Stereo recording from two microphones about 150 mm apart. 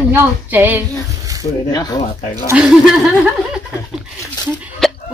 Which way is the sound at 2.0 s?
55° left (ahead or behind).